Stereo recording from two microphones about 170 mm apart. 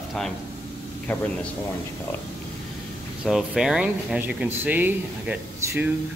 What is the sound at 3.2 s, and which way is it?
Speech, centre (ahead or behind).